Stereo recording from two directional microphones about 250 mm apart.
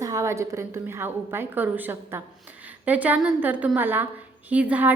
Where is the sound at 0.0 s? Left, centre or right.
Centre.